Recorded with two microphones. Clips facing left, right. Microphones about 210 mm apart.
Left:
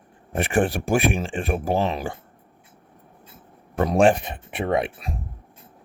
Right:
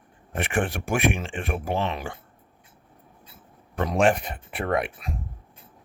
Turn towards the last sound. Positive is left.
turn(degrees=25)  # may be behind; listen again after turning